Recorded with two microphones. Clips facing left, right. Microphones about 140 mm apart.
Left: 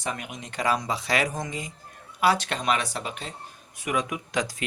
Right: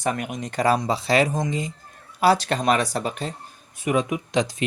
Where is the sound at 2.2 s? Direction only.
35° right (ahead or behind).